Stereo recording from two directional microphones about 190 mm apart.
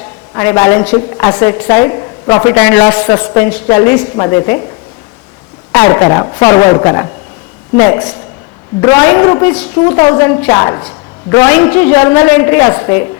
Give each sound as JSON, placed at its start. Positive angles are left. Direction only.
{"t": 0.3, "sound": "a woman's voice", "side_deg": 15}
{"t": 5.7, "sound": "a woman's voice", "side_deg": 15}